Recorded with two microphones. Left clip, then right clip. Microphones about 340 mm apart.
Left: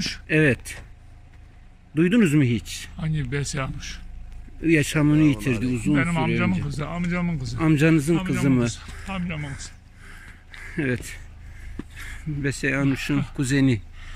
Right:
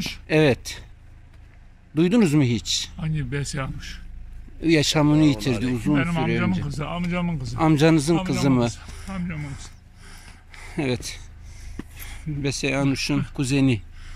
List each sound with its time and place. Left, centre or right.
0.0 s speech: centre
2.0 s speech: centre
4.6 s speech: centre
5.6 s speech: right
5.9 s speech: centre
8.8 s speech: centre
10.6 s a sound: centre
13.4 s speech: centre